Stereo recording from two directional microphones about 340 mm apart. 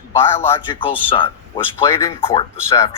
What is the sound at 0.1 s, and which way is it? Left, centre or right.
A man's voice, centre.